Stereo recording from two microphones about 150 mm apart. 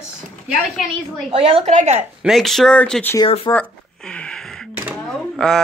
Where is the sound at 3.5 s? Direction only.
20° left (ahead or behind).